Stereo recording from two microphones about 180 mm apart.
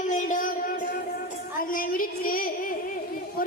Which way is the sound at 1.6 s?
50° left (ahead or behind).